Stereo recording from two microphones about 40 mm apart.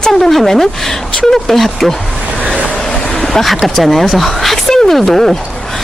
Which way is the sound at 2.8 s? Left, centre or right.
Centre.